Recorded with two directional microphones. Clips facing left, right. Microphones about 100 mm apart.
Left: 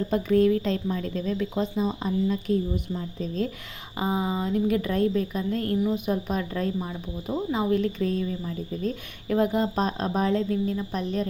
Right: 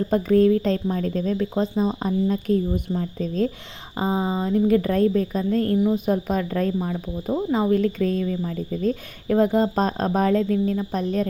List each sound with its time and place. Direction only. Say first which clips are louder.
0.1 s a woman's voice: right 4 dB; 40° right (ahead or behind)
3.9 s a woman's voice: right 3 dB; 30° right (ahead or behind)